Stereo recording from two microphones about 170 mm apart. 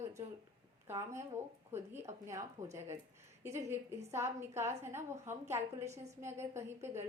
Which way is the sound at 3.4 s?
15° right (ahead or behind).